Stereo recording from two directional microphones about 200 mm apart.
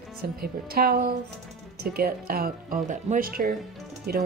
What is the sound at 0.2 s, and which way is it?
Speech, 50° right (ahead or behind).